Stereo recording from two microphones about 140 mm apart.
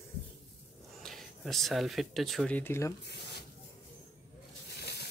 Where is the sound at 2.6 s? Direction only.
20° left (ahead or behind).